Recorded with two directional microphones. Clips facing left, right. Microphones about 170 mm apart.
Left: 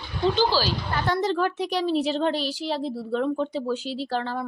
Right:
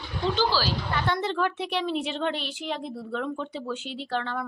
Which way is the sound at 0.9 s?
40° left (ahead or behind).